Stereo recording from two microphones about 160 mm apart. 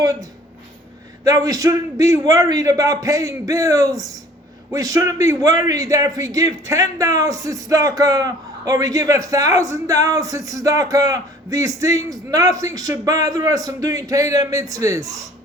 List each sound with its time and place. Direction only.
0.0 s speech: 20° right (ahead or behind)